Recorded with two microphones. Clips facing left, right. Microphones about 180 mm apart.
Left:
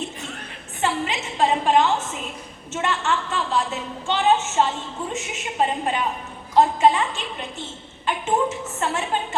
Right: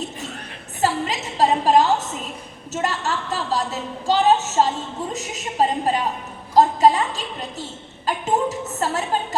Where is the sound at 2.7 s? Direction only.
40° right (ahead or behind).